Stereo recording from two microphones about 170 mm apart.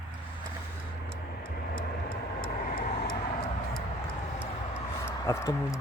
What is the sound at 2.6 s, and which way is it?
Vehicle, 55° left (ahead or behind).